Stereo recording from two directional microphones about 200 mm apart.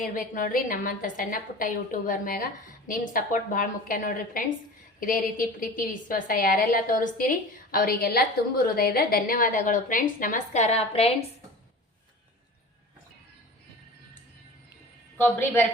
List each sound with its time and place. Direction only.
0.0 s a woman's voice: 45° left (ahead or behind)
15.2 s a woman's voice: 10° left (ahead or behind)